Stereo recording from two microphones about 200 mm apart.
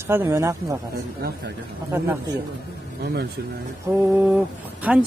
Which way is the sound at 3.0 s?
55° right (ahead or behind).